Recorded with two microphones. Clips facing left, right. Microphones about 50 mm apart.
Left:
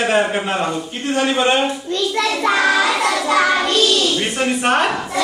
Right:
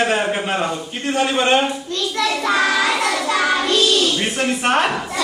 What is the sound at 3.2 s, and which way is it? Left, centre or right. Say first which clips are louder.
Child singing: left 6 dB; left.